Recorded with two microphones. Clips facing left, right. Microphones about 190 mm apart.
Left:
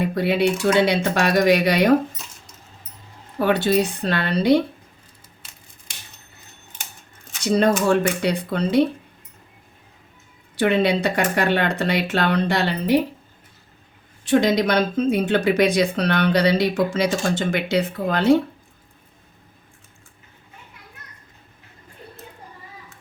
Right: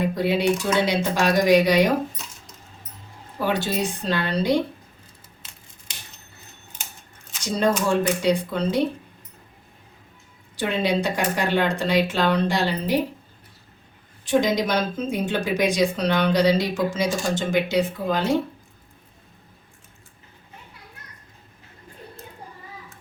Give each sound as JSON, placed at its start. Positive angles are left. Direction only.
{"t": 0.1, "sound": "speech", "side_deg": 60}
{"t": 3.3, "sound": "speech", "side_deg": 60}
{"t": 7.4, "sound": "speech", "side_deg": 65}
{"t": 10.6, "sound": "speech", "side_deg": 60}
{"t": 14.3, "sound": "speech", "side_deg": 65}